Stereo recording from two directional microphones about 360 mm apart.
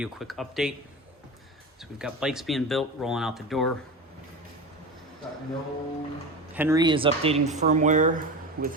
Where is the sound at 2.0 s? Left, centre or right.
Centre.